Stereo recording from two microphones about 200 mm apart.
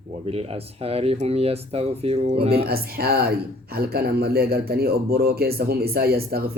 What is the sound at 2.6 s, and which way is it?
Speech, 50° right (ahead or behind).